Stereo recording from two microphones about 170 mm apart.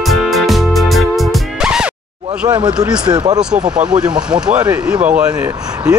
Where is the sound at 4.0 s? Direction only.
5° right (ahead or behind).